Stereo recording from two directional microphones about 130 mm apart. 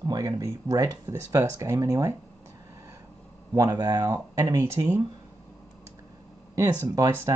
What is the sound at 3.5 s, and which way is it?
Speech, 30° right (ahead or behind).